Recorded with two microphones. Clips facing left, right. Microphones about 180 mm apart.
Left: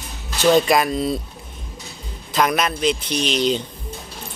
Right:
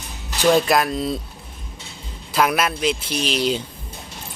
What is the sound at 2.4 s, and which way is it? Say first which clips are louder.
A man's voice: even; 5° right (ahead or behind).